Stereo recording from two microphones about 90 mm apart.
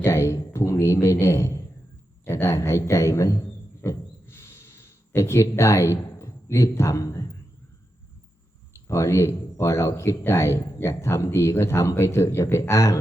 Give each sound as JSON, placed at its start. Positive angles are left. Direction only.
{"t": 0.0, "sound": "speech", "side_deg": 30}
{"t": 3.8, "sound": "a sound", "side_deg": 30}
{"t": 8.9, "sound": "speech", "side_deg": 30}